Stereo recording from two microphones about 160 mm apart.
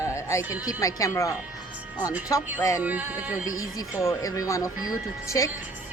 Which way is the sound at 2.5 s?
20° left (ahead or behind).